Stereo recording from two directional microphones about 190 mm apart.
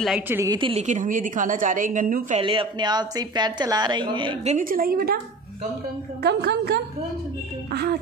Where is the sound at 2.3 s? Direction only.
25° right (ahead or behind).